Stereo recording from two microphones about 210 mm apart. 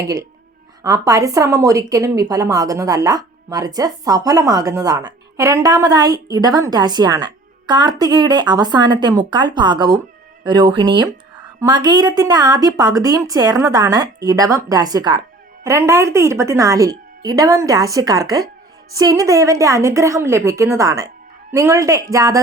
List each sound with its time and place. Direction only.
0.0 s a woman's voice: 15° right (ahead or behind)